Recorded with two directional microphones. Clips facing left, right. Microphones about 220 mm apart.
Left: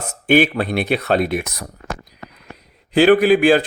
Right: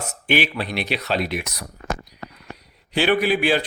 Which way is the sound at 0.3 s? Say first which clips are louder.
Left 8 dB; 50° left (ahead or behind).